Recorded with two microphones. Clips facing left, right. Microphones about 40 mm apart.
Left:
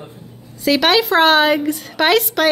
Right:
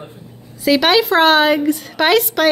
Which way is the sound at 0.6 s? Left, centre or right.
Centre.